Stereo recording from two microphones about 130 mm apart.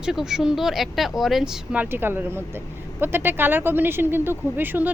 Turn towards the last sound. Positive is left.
turn(degrees=-15)  # may be behind; listen again after turning